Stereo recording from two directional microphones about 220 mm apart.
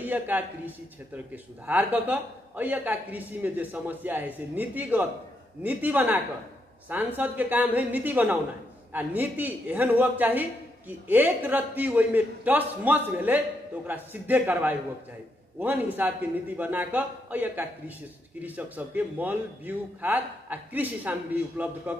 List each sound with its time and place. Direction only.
0.0 s a man's voice: 10° right (ahead or behind)